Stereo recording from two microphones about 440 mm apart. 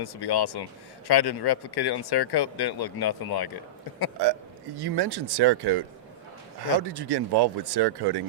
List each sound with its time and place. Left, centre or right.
0.0 s speech: left
4.8 s speech: right
6.8 s speech: right